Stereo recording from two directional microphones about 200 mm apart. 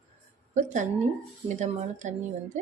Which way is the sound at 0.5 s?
35° right (ahead or behind).